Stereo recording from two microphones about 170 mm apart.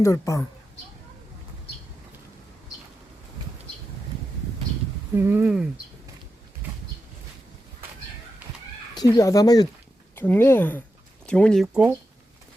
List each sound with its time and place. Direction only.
0.0 s speech: 20° left (ahead or behind)
5.1 s speech: 10° right (ahead or behind)
9.1 s speech: 20° left (ahead or behind); by 11.9 s 5° right (ahead or behind)